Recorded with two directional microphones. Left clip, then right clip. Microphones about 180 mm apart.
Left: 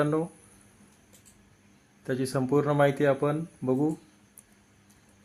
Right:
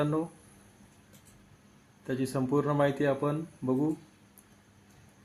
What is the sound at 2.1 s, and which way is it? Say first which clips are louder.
Speech: left 3 dB; 40° left (ahead or behind).